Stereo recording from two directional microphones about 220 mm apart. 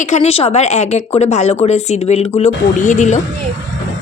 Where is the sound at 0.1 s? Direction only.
30° left (ahead or behind).